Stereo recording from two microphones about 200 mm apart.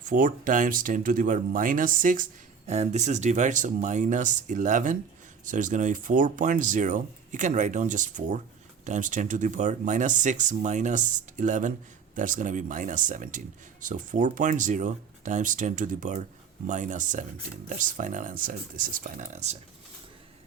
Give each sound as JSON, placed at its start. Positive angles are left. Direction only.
{"t": 0.0, "sound": "speech", "side_deg": -40}